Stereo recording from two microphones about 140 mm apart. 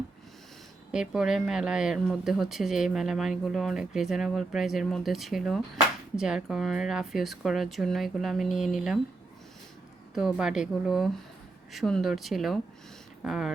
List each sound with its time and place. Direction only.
0.9 s speech: 5° right (ahead or behind)
10.2 s speech: 5° right (ahead or behind)